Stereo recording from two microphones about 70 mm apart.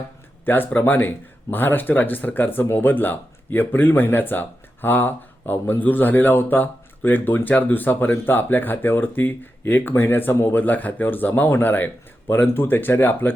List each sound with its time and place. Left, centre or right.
0.4 s speech: left